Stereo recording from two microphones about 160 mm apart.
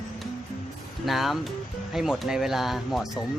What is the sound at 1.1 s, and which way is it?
Speech, centre (ahead or behind).